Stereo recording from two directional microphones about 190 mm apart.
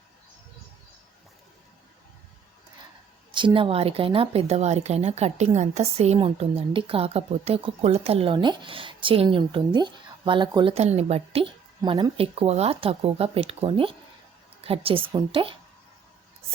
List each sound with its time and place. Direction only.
3.3 s speech: 25° right (ahead or behind)
11.8 s speech: 20° right (ahead or behind)